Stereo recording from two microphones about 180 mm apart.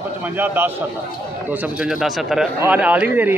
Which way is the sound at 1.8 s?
Centre (ahead or behind).